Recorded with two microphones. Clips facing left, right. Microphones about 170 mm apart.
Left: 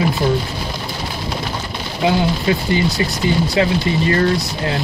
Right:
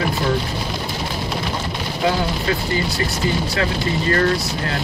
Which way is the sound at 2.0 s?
20° left (ahead or behind).